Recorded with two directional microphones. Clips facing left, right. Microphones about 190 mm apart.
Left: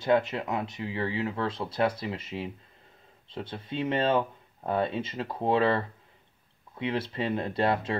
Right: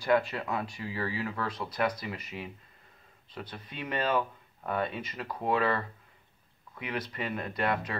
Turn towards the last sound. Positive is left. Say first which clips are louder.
# left 4 dB
turn(degrees=30)  # may be behind; listen again after turning